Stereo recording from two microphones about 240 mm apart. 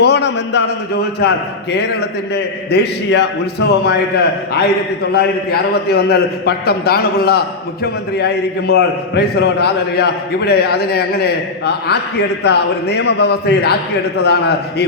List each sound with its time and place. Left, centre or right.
0.0 s a man's voice: left
1.7 s a man's voice: left